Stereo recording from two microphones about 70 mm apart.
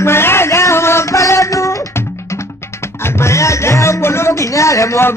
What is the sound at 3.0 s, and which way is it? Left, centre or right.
Speech, left.